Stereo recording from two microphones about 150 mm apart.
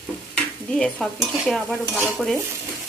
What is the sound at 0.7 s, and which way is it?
Frying, centre (ahead or behind).